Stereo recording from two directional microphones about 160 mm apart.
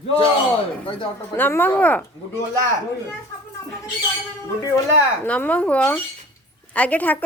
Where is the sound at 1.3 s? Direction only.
10° left (ahead or behind).